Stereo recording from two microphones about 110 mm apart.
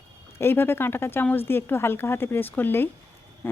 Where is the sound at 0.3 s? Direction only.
20° left (ahead or behind).